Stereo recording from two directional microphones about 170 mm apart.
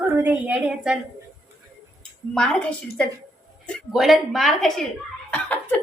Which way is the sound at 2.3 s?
5° left (ahead or behind).